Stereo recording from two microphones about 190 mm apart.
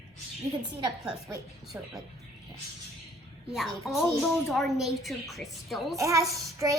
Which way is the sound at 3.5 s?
Centre (ahead or behind).